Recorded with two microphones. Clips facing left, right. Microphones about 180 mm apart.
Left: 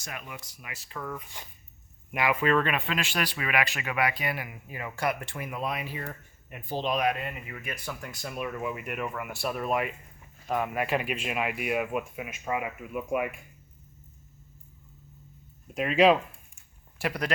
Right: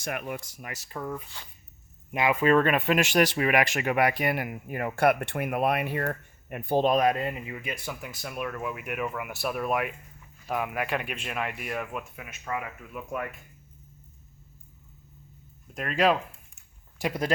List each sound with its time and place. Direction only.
0.0 s speech: 60° right (ahead or behind); by 1.0 s 40° right (ahead or behind)
2.1 s speech: 25° right (ahead or behind)
7.4 s speech: 20° right (ahead or behind)
8.1 s speech: centre (ahead or behind)
15.7 s speech: 5° left (ahead or behind)
17.0 s speech: 25° right (ahead or behind)